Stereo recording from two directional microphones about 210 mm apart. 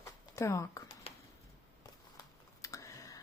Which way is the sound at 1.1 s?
30° left (ahead or behind).